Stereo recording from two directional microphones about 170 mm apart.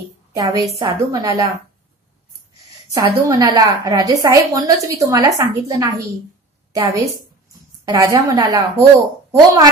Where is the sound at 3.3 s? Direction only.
20° right (ahead or behind).